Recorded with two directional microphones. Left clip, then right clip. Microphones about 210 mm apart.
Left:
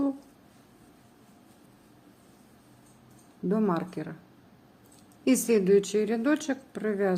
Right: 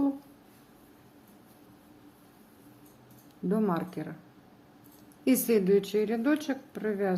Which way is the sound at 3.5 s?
10° left (ahead or behind).